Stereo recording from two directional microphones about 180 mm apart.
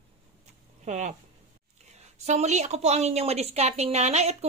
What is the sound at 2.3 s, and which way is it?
A woman's voice, 40° right (ahead or behind).